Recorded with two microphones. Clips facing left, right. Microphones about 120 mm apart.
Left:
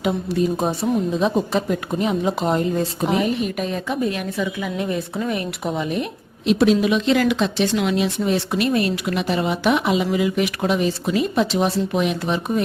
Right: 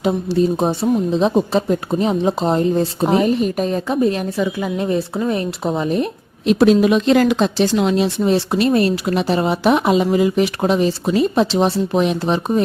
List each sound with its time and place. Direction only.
0.0 s a woman's voice: 30° right (ahead or behind)